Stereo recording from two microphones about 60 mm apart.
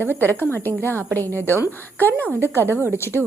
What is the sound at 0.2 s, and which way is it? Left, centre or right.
A woman's voice, left.